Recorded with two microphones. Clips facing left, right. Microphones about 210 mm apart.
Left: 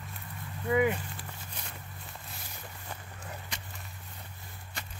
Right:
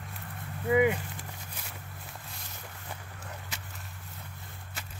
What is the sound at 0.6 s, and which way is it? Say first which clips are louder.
Speech: right 2 dB; 15° right (ahead or behind).